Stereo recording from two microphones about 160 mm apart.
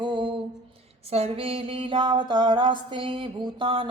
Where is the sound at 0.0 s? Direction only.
30° right (ahead or behind).